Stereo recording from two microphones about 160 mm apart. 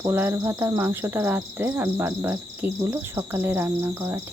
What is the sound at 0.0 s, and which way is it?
Cricket, 15° right (ahead or behind).